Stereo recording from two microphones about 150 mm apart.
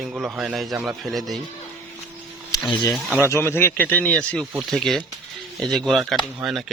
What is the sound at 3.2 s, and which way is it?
Speech, 15° left (ahead or behind).